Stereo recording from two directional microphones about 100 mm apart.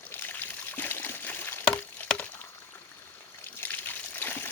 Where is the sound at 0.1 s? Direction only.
20° left (ahead or behind).